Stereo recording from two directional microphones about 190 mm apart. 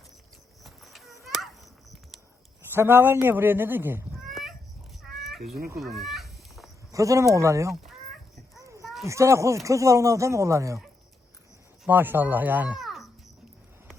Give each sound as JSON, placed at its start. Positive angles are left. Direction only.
{"t": 0.6, "sound": "children playing", "side_deg": 0}
{"t": 2.7, "sound": "a woman's voice", "side_deg": -10}
{"t": 4.3, "sound": "a sound", "side_deg": 0}
{"t": 5.8, "sound": "fowl", "side_deg": 0}
{"t": 6.9, "sound": "a woman's voice", "side_deg": -15}
{"t": 8.6, "sound": "children playing", "side_deg": -15}
{"t": 9.0, "sound": "a woman's voice", "side_deg": -15}
{"t": 11.9, "sound": "speech", "side_deg": -10}